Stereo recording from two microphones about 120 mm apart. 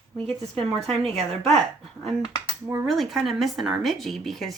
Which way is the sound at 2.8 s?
Centre (ahead or behind).